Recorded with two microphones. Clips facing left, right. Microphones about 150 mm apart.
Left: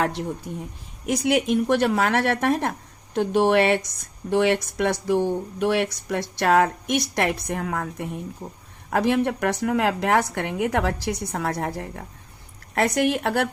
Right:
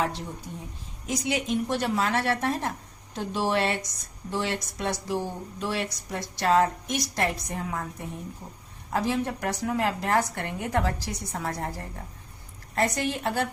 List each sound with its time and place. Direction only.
1.0 s a woman's voice: 70° left (ahead or behind)